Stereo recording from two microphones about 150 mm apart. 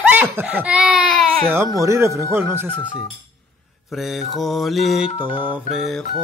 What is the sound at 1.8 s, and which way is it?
Speech, 20° right (ahead or behind).